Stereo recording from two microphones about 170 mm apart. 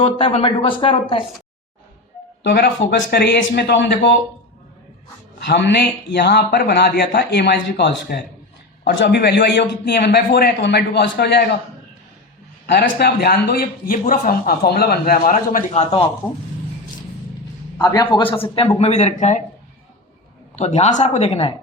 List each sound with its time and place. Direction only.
0.0 s speech: 30° left (ahead or behind)
2.4 s speech: 75° left (ahead or behind); by 4.2 s 90° left
5.5 s a man's voice: 90° left
12.6 s a man's voice: 70° left (ahead or behind); by 15.8 s 55° left (ahead or behind)
15.8 s speech: 35° left (ahead or behind)
17.7 s speech: 25° left (ahead or behind); by 19.4 s 40° left (ahead or behind)
20.6 s speech: 40° left (ahead or behind)